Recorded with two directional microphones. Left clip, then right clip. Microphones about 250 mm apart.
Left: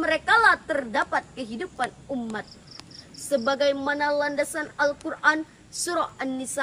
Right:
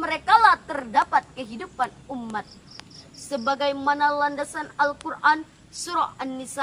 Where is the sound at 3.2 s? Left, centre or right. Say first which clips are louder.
Left 2 dB; centre.